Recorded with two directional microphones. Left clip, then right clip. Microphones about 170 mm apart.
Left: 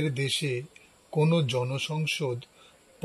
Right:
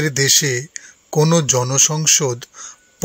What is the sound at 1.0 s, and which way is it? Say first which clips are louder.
Speech: right 11 dB; 35° right (ahead or behind).